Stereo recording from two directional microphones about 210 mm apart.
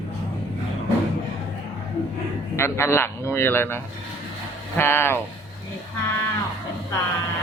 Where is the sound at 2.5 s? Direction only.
10° left (ahead or behind).